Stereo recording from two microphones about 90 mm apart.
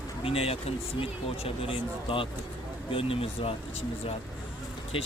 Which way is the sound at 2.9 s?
90° left.